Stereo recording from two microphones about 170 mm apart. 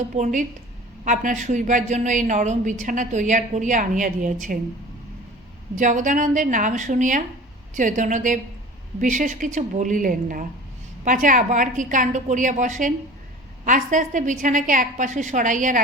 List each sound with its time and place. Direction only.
0.1 s a woman's voice: 50° right (ahead or behind)
5.7 s a woman's voice: 50° right (ahead or behind)